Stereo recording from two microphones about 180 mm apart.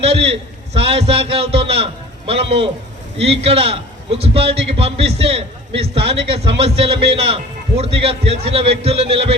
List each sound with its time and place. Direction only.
0.0 s a man's voice: 30° right (ahead or behind)